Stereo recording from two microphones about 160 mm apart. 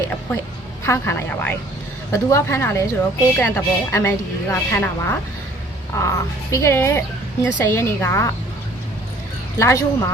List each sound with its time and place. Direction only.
0.9 s a woman's voice: 15° left (ahead or behind)
9.6 s speech: 20° left (ahead or behind)